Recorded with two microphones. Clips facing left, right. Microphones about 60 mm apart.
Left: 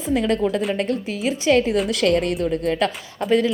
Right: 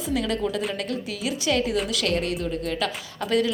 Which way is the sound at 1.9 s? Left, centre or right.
Left.